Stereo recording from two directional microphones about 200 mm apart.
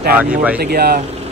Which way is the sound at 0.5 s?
50° right (ahead or behind).